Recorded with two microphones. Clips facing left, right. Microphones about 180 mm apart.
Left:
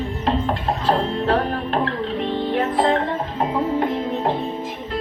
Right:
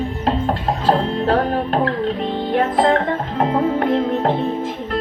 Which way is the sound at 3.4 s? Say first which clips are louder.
Right 3 dB; 70° right (ahead or behind).